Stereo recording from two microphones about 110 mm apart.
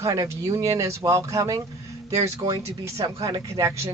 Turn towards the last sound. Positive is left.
turn(degrees=-30)  # may be behind; listen again after turning